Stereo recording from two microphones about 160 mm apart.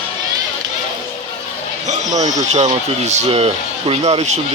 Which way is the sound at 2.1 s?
45° right (ahead or behind).